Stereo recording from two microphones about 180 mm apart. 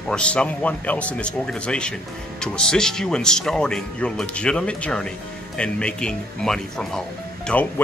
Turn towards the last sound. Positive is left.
turn(degrees=10)  # may be behind; listen again after turning